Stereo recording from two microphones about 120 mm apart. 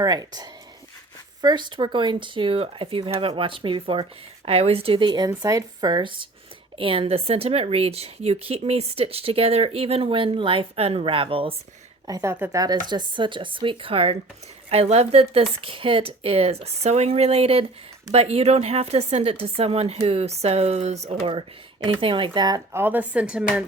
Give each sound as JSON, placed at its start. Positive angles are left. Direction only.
{"t": 0.0, "sound": "a woman's voice", "side_deg": -35}
{"t": 12.0, "sound": "a woman's voice", "side_deg": -30}
{"t": 22.0, "sound": "speech", "side_deg": -45}
{"t": 22.7, "sound": "speech", "side_deg": -15}